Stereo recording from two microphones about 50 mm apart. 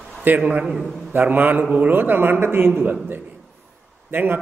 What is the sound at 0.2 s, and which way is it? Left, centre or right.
Speech, right.